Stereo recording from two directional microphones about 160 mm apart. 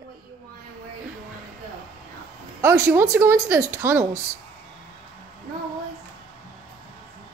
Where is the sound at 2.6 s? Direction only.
15° right (ahead or behind).